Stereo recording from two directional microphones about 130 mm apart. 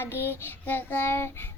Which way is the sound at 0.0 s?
20° left (ahead or behind).